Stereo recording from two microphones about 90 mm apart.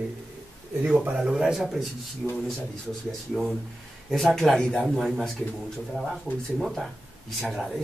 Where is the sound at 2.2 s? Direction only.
15° left (ahead or behind).